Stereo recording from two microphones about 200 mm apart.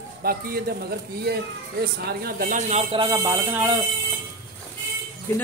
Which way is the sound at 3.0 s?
15° right (ahead or behind).